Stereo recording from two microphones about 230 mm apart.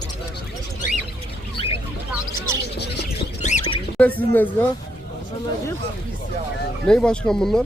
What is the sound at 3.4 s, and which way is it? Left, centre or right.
Bird, left.